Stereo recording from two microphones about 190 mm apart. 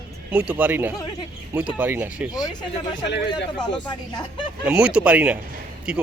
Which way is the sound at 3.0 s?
65° left (ahead or behind).